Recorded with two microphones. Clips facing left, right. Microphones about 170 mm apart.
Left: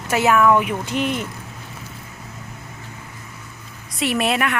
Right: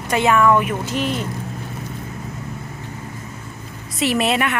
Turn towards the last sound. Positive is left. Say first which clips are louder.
# right 2 dB
turn(degrees=0)  # may be behind; listen again after turning